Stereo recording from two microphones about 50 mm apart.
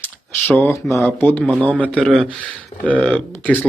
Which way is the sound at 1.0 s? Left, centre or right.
Left.